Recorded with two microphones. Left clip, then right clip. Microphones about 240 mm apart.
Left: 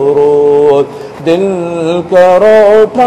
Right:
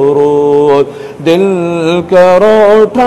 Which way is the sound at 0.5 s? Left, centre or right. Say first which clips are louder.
Even; right.